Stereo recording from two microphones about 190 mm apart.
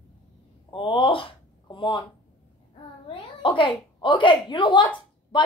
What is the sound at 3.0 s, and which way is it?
A woman's voice, 25° left (ahead or behind).